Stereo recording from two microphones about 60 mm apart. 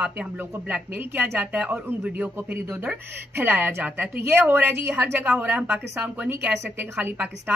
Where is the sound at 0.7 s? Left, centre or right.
Right.